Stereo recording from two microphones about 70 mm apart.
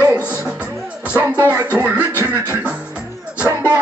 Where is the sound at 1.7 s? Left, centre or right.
Centre.